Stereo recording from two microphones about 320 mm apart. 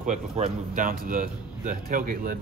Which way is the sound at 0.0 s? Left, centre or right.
Right.